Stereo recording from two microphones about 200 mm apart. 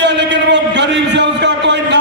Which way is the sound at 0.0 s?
60° right (ahead or behind).